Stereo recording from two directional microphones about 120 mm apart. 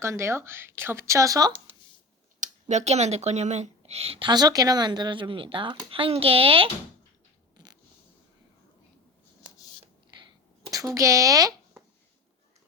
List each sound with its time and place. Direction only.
0.0 s speech: 20° right (ahead or behind)
2.4 s speech: 75° right (ahead or behind); by 4.3 s 55° right (ahead or behind)
4.3 s speech: 35° right (ahead or behind); by 6.7 s 50° right (ahead or behind)
7.5 s a sound: 35° right (ahead or behind)
10.1 s sneeze: 40° right (ahead or behind)
10.7 s speech: 30° right (ahead or behind)